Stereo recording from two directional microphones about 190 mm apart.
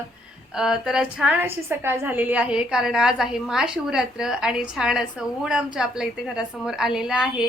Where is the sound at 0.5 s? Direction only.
5° right (ahead or behind).